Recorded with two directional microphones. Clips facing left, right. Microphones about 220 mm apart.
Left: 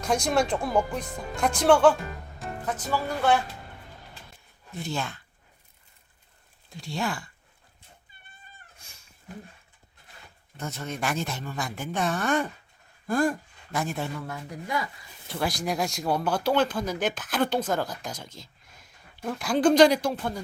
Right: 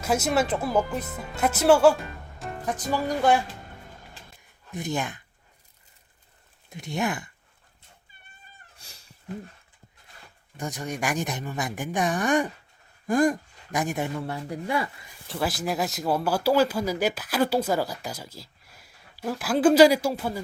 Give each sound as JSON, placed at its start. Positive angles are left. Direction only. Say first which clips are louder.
{"t": 0.0, "sound": "speech", "louder": "right 1 dB", "side_deg": -5}
{"t": 4.7, "sound": "speech", "louder": "right 3 dB", "side_deg": -15}
{"t": 6.7, "sound": "speech", "louder": "right 3 dB", "side_deg": -20}
{"t": 8.8, "sound": "cat", "louder": "right 3 dB", "side_deg": -35}
{"t": 10.6, "sound": "speech", "louder": "right 2 dB", "side_deg": -15}
{"t": 14.2, "sound": "speech", "louder": "right 5 dB", "side_deg": -30}
{"t": 15.3, "sound": "speech", "louder": "right 1 dB", "side_deg": 0}